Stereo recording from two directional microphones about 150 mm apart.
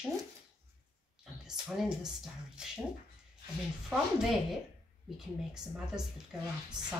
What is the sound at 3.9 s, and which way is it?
Speech, 5° right (ahead or behind).